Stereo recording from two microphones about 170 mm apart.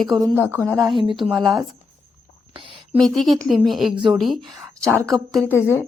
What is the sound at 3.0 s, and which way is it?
Speech, centre (ahead or behind).